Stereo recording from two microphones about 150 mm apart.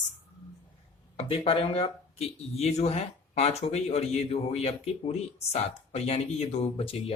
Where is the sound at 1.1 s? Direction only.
40° left (ahead or behind).